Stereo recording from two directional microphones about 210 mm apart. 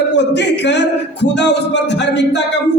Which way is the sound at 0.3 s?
55° left (ahead or behind).